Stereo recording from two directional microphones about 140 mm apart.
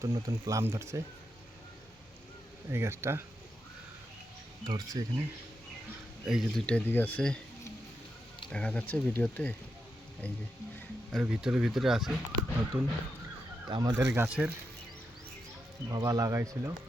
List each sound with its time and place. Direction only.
0.0 s speech: 25° right (ahead or behind)
2.6 s speech: 20° right (ahead or behind)
4.6 s speech: 30° right (ahead or behind)
6.2 s speech: 5° right (ahead or behind)
6.7 s speech: 10° left (ahead or behind)
8.4 s speech: 5° left (ahead or behind)
11.1 s speech: 5° right (ahead or behind)
12.7 s speech: 15° right (ahead or behind)
13.7 s speech: 30° right (ahead or behind)
14.3 s speech: 10° right (ahead or behind)
15.9 s speech: 25° right (ahead or behind)